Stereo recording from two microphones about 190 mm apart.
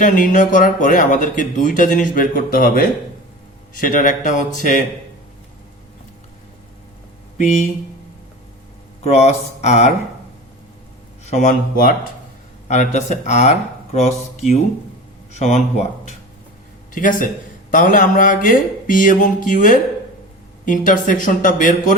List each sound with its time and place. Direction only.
0.0 s speech: 45° left (ahead or behind)
7.3 s speech: 40° left (ahead or behind)
9.1 s speech: 35° left (ahead or behind)
11.3 s speech: 40° left (ahead or behind)
16.9 s speech: 45° left (ahead or behind)